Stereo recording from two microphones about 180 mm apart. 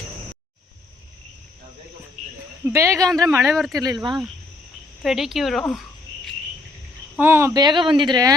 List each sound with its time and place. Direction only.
2.6 s speech: 15° right (ahead or behind)
3.4 s speech: centre (ahead or behind)
3.8 s speech: 20° right (ahead or behind)
5.0 s speech: centre (ahead or behind)
7.2 s speech: 15° right (ahead or behind)